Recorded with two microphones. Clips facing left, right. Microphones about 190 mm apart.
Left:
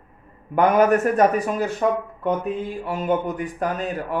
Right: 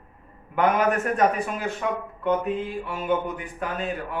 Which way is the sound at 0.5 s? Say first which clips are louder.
Left 5 dB; 40° left (ahead or behind).